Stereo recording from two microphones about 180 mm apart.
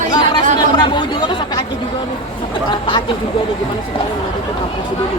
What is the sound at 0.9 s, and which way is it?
Speech, 25° left (ahead or behind).